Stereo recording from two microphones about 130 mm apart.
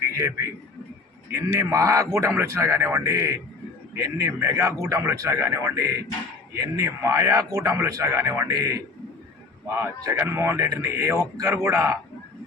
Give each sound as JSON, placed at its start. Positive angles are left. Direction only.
{"t": 0.2, "sound": "a man's voice", "side_deg": -20}